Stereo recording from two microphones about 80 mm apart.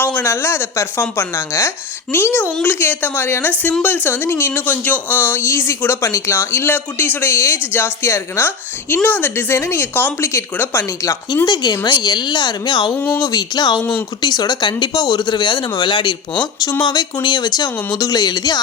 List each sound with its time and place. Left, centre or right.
0.0 s a sound: left
0.3 s speech: left
2.1 s speech: left
11.4 s speech: left
13.1 s speech: left
16.8 s speech: left